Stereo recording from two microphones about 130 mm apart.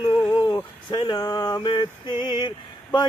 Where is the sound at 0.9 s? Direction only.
35° left (ahead or behind).